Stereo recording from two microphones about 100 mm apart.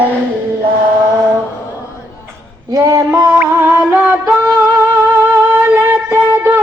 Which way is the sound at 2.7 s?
35° right (ahead or behind).